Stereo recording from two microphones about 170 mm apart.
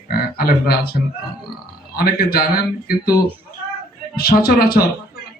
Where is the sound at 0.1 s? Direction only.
65° left (ahead or behind).